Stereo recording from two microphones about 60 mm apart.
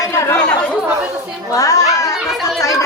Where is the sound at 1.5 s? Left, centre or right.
Left.